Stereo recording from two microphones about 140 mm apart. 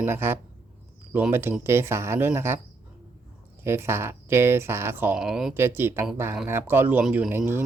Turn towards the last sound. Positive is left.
turn(degrees=-15)  # may be behind; listen again after turning